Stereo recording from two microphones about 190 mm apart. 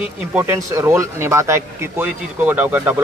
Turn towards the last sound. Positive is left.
turn(degrees=-10)  # may be behind; listen again after turning